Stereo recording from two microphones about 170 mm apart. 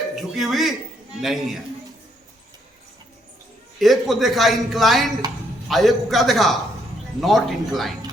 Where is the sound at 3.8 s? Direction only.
Centre (ahead or behind).